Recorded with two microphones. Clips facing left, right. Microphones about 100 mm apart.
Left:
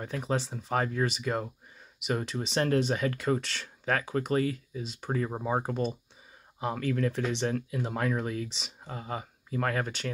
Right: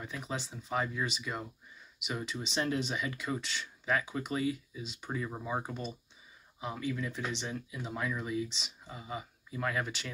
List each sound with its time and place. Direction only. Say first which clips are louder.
0.0 s speech: left 8 dB; 50° left (ahead or behind)